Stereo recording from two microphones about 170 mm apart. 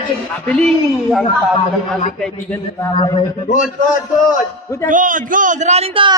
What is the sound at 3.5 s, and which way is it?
Speech, 50° left (ahead or behind).